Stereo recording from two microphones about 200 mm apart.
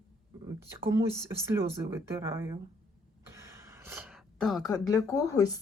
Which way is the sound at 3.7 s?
10° right (ahead or behind).